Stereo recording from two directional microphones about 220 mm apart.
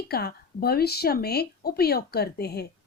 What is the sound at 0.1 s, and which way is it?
Speech, 45° left (ahead or behind).